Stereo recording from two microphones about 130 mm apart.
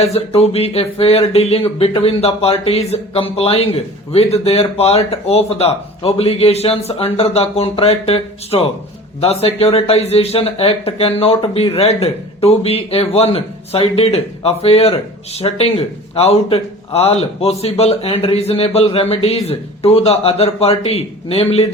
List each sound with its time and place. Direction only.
0.0 s speech: 55° left (ahead or behind)